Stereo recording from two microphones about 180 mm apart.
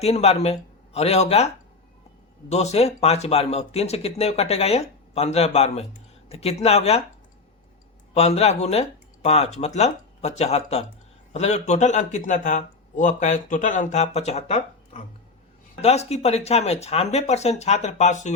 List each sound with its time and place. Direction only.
0.0 s a man's voice: 35° left (ahead or behind)
2.5 s speech: 35° left (ahead or behind)
8.1 s speech: 35° left (ahead or behind)